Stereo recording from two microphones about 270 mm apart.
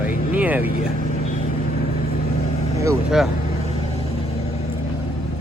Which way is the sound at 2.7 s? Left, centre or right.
Centre.